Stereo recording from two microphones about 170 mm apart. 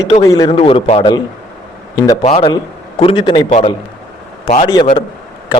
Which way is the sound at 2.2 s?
35° left (ahead or behind).